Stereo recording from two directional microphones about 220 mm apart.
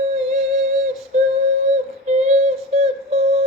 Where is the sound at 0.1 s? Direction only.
30° right (ahead or behind).